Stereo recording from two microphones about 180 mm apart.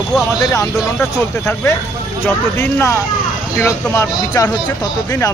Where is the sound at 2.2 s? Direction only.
15° left (ahead or behind).